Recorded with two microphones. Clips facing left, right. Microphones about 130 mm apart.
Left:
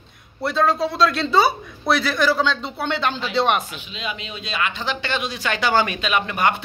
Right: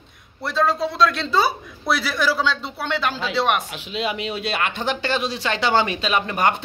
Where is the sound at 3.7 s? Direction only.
70° right (ahead or behind); by 6.5 s 40° right (ahead or behind).